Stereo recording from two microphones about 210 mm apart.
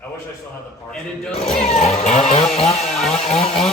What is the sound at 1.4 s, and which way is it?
Vehicle, 30° left (ahead or behind).